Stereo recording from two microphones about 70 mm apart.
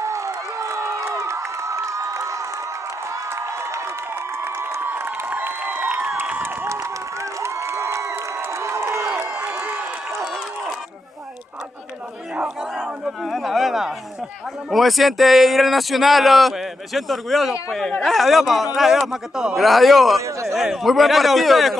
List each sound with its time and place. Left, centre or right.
0.0 s crowd: right
6.8 s crowd: right
9.3 s crowd: right
12.7 s a sound: centre
14.7 s speech: centre
20.2 s speech: right
20.5 s speech: centre